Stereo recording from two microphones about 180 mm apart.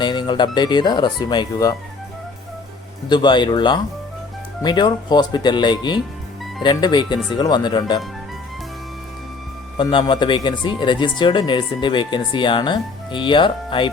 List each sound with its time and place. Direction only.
0.0 s speech: 25° left (ahead or behind)
3.1 s speech: 25° left (ahead or behind)
9.7 s speech: 25° left (ahead or behind)